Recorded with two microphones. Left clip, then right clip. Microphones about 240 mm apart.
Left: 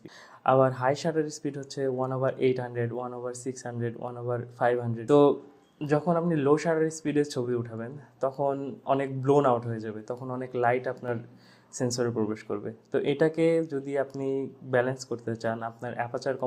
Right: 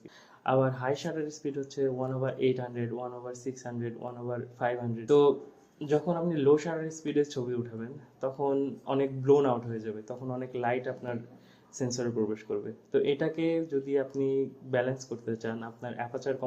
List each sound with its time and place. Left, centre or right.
0.4 s speech: left